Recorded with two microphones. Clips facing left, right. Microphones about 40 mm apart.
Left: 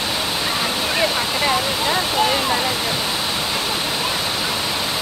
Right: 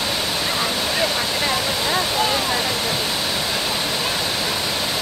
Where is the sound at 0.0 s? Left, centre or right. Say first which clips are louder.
Left 1 dB; centre.